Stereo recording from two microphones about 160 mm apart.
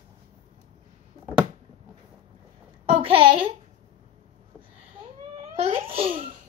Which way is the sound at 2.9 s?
35° right (ahead or behind).